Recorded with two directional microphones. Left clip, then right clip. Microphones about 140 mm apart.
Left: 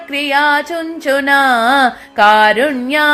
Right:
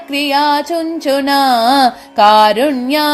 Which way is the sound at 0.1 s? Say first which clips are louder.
Even; 30° right (ahead or behind).